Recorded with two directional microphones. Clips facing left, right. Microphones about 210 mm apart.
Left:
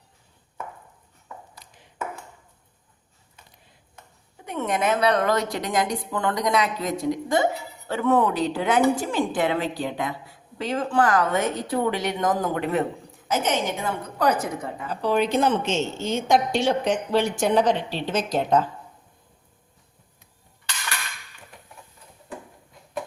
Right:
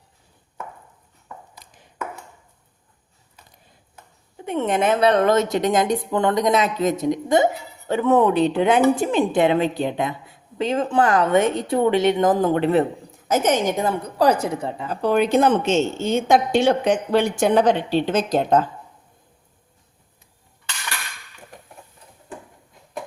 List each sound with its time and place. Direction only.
4.4 s a woman's voice: 25° right (ahead or behind)
13.3 s a woman's voice: 45° right (ahead or behind)
14.4 s a woman's voice: 30° right (ahead or behind)
14.8 s a woman's voice: 50° right (ahead or behind)